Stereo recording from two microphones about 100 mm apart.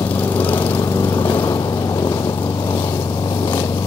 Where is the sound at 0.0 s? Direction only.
20° left (ahead or behind).